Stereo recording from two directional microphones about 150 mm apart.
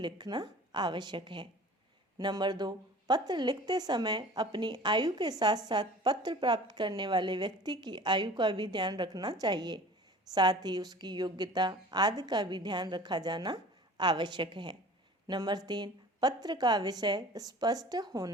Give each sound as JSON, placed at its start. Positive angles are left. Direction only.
{"t": 0.0, "sound": "a woman's voice", "side_deg": -30}